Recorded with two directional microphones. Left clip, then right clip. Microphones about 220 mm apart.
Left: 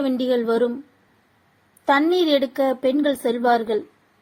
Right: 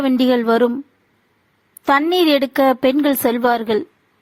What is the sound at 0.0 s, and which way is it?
Speech, 50° right (ahead or behind).